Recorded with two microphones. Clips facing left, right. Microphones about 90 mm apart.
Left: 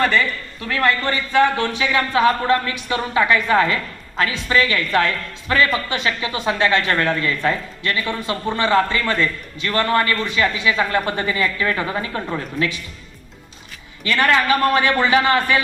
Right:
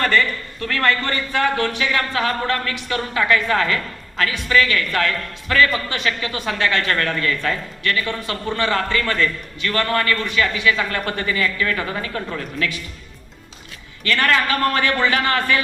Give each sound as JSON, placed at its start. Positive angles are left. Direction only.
{"t": 0.0, "sound": "a man's voice", "side_deg": 5}
{"t": 14.0, "sound": "a man's voice", "side_deg": 20}